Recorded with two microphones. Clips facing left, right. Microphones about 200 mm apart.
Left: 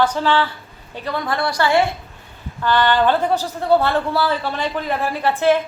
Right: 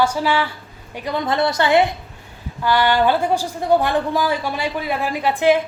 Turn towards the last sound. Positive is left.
turn(degrees=-15)  # may be behind; listen again after turning